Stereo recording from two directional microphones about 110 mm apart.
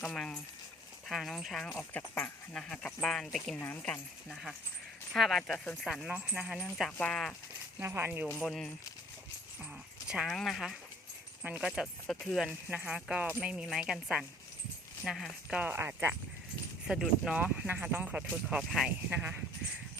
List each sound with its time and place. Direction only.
0.0 s speech: 5° left (ahead or behind)
1.8 s speech: 15° left (ahead or behind)
3.6 s speech: 15° left (ahead or behind)
5.1 s speech: centre (ahead or behind)
6.1 s speech: 15° right (ahead or behind)
6.4 s speech: centre (ahead or behind)
7.8 s speech: 20° right (ahead or behind)
8.4 s speech: centre (ahead or behind)
10.1 s speech: 5° right (ahead or behind)
12.0 s speech: 5° left (ahead or behind)
12.7 s speech: 10° right (ahead or behind)
15.5 s speech: 20° right (ahead or behind)
16.8 s speech: 5° right (ahead or behind)
18.9 s speech: 15° right (ahead or behind)